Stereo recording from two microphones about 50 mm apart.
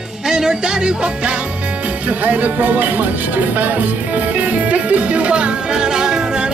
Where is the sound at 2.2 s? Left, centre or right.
Right.